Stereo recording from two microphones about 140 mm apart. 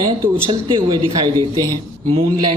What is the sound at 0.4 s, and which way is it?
Speech, 35° right (ahead or behind).